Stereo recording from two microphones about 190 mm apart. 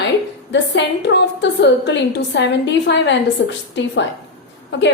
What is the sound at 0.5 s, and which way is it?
A woman's voice, 70° left (ahead or behind).